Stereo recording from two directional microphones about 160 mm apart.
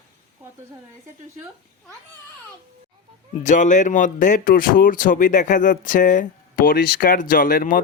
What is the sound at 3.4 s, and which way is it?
Speech, 50° left (ahead or behind).